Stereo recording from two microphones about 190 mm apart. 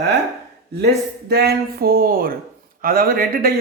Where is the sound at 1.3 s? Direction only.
55° right (ahead or behind).